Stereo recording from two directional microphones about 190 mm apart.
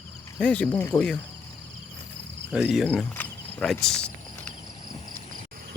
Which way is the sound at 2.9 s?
10° left (ahead or behind).